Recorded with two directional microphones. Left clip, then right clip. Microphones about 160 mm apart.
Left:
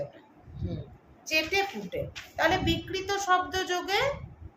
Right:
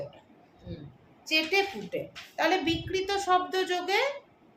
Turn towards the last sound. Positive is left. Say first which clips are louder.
# right 1 dB
turn(degrees=-20)  # may be behind; listen again after turning